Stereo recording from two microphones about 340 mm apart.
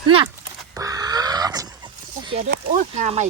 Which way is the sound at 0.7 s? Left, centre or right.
Centre.